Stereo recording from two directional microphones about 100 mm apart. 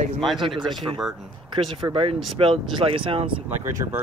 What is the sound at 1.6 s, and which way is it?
Speech, 75° right (ahead or behind).